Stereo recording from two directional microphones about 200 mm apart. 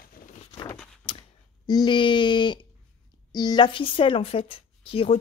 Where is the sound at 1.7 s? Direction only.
20° left (ahead or behind).